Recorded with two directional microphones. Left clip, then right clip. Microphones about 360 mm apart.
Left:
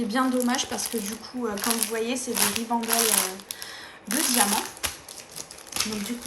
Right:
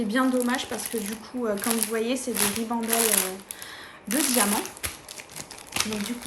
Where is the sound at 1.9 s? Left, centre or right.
Centre.